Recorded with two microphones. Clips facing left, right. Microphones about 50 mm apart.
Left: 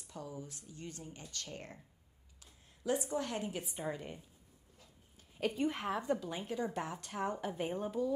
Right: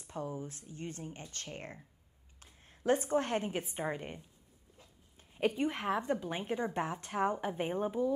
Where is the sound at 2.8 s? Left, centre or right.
Right.